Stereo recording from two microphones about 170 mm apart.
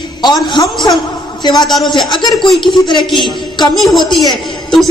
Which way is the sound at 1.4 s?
25° left (ahead or behind).